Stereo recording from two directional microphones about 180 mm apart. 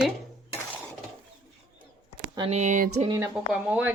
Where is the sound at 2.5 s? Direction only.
40° right (ahead or behind).